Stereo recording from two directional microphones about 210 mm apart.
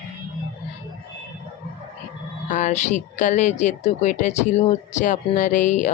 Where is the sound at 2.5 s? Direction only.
35° left (ahead or behind).